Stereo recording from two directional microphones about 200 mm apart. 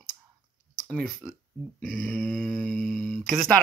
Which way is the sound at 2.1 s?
5° left (ahead or behind).